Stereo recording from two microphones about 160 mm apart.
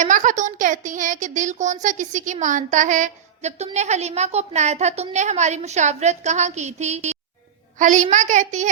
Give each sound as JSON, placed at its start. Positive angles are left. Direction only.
{"t": 0.0, "sound": "a woman's voice", "side_deg": -50}